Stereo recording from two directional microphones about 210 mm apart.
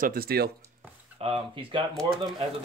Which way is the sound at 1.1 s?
30° right (ahead or behind).